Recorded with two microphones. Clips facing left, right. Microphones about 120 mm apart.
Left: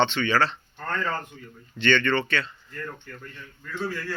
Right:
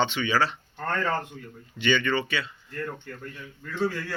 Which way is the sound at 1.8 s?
10° right (ahead or behind).